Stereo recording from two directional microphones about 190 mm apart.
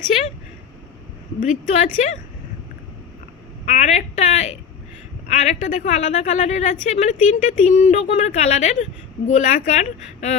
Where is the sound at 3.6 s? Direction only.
35° left (ahead or behind).